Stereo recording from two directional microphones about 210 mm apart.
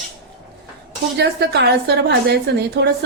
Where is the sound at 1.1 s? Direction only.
50° right (ahead or behind).